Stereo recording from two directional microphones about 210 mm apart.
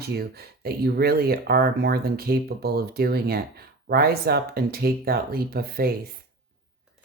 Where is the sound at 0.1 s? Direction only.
45° right (ahead or behind).